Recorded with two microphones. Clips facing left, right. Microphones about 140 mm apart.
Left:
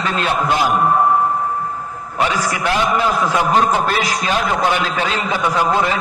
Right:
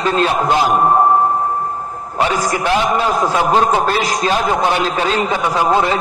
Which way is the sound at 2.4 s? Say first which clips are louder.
Right 2 dB; 40° right (ahead or behind).